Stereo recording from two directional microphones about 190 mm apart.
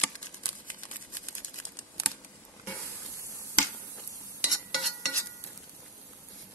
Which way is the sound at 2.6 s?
15° left (ahead or behind).